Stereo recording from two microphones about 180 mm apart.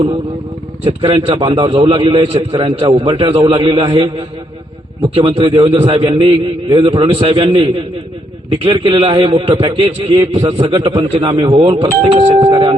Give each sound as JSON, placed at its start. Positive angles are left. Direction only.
{"t": 0.9, "sound": "a man's voice", "side_deg": -30}
{"t": 5.1, "sound": "a man's voice", "side_deg": -30}